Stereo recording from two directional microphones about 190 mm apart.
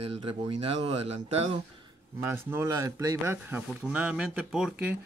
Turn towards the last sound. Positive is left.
turn(degrees=-5)  # may be behind; listen again after turning